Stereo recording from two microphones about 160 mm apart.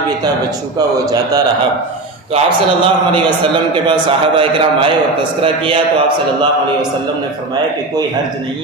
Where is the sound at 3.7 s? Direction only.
30° right (ahead or behind).